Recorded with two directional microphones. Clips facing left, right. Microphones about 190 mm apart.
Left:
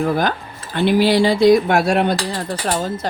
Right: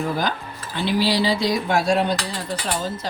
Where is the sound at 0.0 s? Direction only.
55° left (ahead or behind).